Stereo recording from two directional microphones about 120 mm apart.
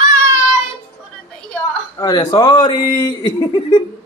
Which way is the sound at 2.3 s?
35° left (ahead or behind).